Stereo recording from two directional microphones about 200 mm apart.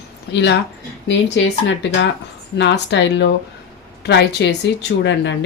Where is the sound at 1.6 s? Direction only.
65° left (ahead or behind).